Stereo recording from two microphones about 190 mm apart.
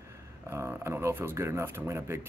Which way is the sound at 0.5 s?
15° right (ahead or behind).